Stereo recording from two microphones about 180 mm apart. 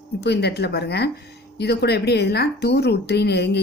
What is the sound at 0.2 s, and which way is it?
A woman's voice, 65° left (ahead or behind).